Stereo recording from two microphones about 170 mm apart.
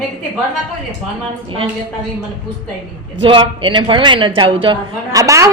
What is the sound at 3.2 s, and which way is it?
A woman's voice, 30° right (ahead or behind).